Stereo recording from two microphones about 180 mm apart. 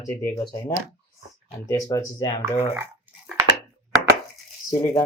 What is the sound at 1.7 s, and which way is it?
Speech, 20° left (ahead or behind).